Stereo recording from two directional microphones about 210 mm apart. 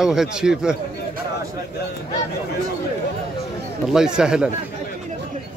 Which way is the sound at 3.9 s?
5° right (ahead or behind).